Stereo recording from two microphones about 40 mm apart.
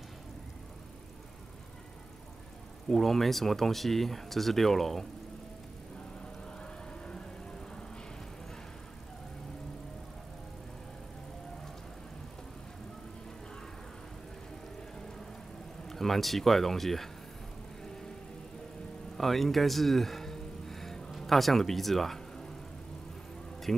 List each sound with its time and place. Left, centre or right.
2.9 s speech: centre
6.6 s a sound: left
15.9 s speech: centre
19.1 s speech: centre